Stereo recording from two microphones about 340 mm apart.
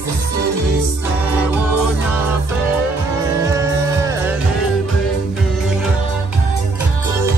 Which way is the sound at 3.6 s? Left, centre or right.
Centre.